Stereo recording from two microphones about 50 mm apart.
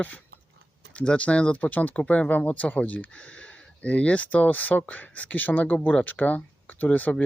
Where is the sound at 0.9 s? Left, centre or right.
Left.